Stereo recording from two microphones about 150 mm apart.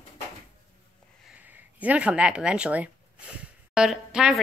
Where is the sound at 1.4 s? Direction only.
10° right (ahead or behind).